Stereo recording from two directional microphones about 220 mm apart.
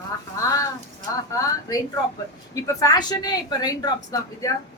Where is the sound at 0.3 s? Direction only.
15° left (ahead or behind).